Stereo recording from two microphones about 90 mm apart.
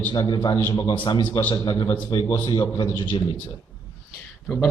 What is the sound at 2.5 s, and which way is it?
Speech, 60° left (ahead or behind).